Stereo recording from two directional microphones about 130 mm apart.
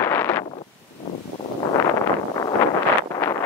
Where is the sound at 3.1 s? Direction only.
25° left (ahead or behind).